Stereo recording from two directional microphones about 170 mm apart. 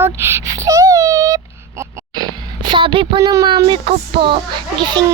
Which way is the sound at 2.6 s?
30° right (ahead or behind).